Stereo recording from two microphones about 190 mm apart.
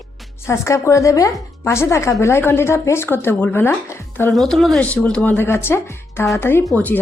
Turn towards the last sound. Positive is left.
turn(degrees=10)  # may be behind; listen again after turning